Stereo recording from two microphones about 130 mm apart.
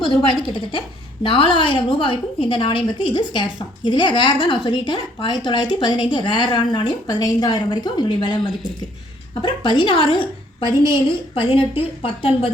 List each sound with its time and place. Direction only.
0.0 s a woman's voice: 40° left (ahead or behind)
9.4 s a woman's voice: 40° left (ahead or behind)